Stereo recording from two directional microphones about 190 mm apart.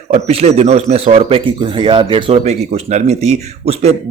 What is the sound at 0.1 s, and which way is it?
Speech, 35° right (ahead or behind).